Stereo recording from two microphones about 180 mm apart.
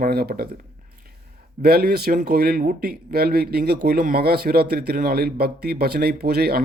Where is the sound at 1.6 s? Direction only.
60° right (ahead or behind).